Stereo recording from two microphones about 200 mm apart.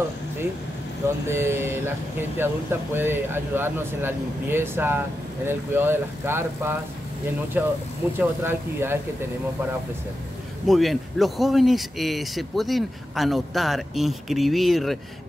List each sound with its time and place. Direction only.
1.2 s speech: 10° right (ahead or behind)
10.7 s a man's voice: centre (ahead or behind)